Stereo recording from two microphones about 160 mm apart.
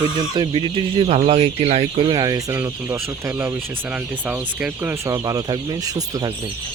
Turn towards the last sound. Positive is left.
turn(degrees=-25)  # may be behind; listen again after turning